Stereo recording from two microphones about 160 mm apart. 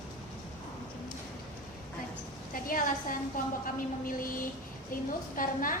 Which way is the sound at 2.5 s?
60° left (ahead or behind).